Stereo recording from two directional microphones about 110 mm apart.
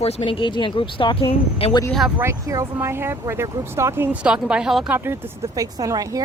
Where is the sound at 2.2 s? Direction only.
25° right (ahead or behind).